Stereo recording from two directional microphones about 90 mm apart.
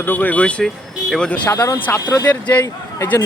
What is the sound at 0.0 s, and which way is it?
Speech, 20° left (ahead or behind).